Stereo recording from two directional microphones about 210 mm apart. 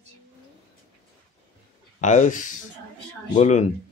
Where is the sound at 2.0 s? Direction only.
35° left (ahead or behind).